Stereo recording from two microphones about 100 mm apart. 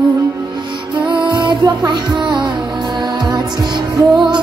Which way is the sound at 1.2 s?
50° right (ahead or behind).